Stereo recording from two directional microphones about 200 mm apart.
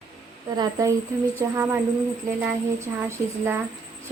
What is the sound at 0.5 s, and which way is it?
A woman's voice, 15° right (ahead or behind).